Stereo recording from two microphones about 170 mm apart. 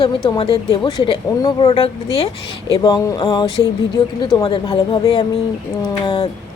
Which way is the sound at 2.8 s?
20° left (ahead or behind).